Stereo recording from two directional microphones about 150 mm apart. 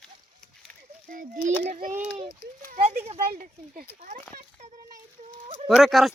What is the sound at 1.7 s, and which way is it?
Speech, 70° right (ahead or behind).